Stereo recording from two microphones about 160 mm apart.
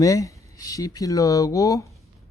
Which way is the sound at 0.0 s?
20° left (ahead or behind).